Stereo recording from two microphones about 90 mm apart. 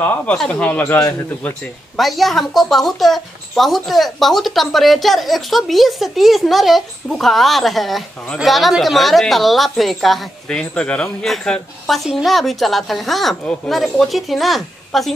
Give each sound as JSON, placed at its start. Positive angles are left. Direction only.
{"t": 0.0, "sound": "speech", "side_deg": 15}
{"t": 2.0, "sound": "a woman's voice", "side_deg": 0}
{"t": 10.6, "sound": "a woman's voice", "side_deg": 10}